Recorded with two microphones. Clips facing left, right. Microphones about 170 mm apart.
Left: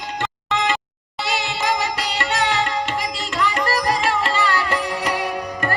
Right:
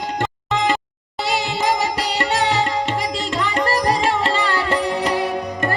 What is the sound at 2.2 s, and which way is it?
Music, 35° right (ahead or behind).